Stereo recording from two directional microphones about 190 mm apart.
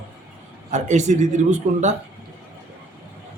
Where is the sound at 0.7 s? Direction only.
40° right (ahead or behind).